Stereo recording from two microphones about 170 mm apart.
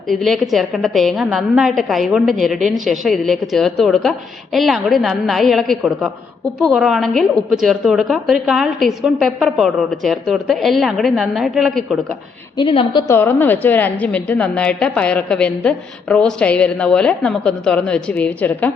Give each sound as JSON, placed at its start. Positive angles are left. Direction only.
{"t": 0.1, "sound": "a woman's voice", "side_deg": 0}
{"t": 12.5, "sound": "a woman's voice", "side_deg": 30}
{"t": 13.1, "sound": "a woman's voice", "side_deg": 15}